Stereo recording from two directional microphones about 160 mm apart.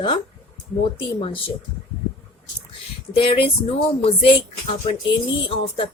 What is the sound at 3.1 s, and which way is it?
Speech, 35° left (ahead or behind).